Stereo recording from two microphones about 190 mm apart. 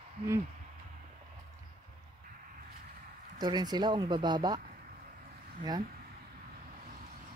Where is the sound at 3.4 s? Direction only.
20° right (ahead or behind).